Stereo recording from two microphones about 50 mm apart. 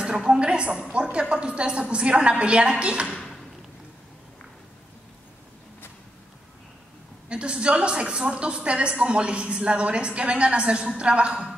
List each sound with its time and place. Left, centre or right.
0.0 s a woman's voice: centre
7.2 s a woman's voice: right